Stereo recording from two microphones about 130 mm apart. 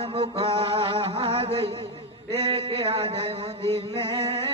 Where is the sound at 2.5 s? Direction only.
45° right (ahead or behind).